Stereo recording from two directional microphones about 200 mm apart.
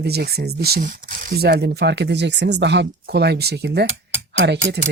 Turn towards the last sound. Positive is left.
turn(degrees=-60)  # may be behind; listen again after turning